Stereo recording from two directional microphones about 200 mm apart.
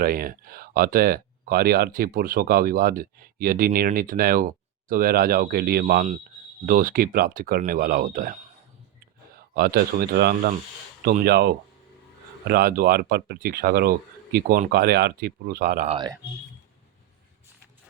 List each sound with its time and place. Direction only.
0.0 s a man's voice: 45° right (ahead or behind)
15.9 s speech: 20° right (ahead or behind)